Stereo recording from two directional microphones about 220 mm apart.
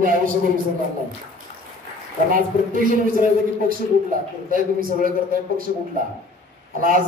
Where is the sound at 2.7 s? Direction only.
40° right (ahead or behind).